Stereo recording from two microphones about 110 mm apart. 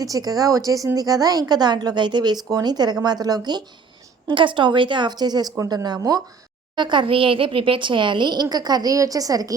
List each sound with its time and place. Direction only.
0.0 s a woman's voice: 35° right (ahead or behind)
4.3 s a woman's voice: 50° right (ahead or behind)